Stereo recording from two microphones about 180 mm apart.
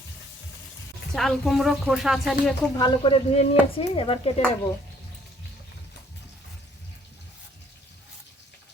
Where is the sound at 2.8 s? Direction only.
25° left (ahead or behind).